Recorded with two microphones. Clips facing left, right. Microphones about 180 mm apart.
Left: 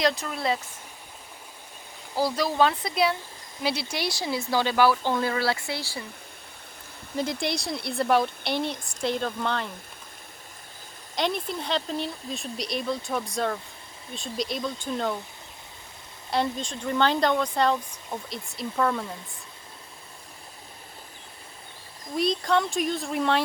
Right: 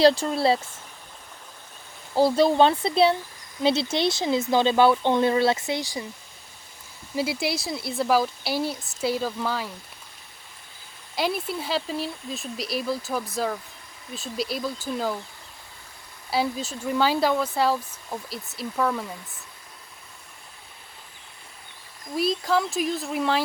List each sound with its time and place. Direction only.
0.0 s speech: 30° right (ahead or behind)
2.1 s speech: 25° right (ahead or behind)
7.2 s speech: 5° right (ahead or behind)
11.1 s speech: 5° right (ahead or behind)
16.3 s speech: 5° right (ahead or behind)
22.1 s speech: 5° right (ahead or behind)